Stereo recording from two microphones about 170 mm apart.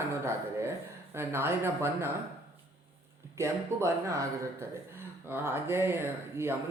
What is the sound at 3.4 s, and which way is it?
Speech, 15° right (ahead or behind).